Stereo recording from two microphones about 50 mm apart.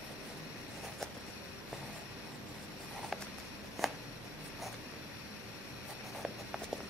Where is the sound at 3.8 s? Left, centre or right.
Centre.